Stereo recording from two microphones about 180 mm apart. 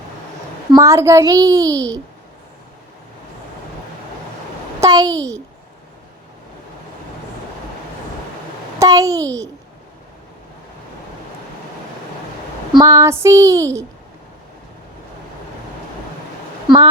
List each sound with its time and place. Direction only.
0.7 s a child's voice: 15° right (ahead or behind)
4.8 s a child's voice: 20° right (ahead or behind)
8.8 s a child's voice: 20° right (ahead or behind)
12.8 s child singing: 20° right (ahead or behind)
16.6 s speech: 25° right (ahead or behind)